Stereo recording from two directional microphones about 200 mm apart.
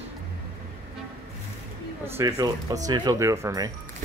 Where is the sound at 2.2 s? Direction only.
15° right (ahead or behind).